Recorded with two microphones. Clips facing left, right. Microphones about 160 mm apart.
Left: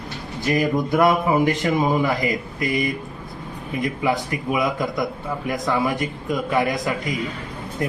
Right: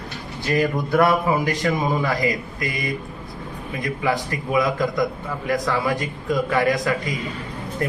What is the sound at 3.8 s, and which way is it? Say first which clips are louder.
A man's voice: left 1 dB; 15° left (ahead or behind).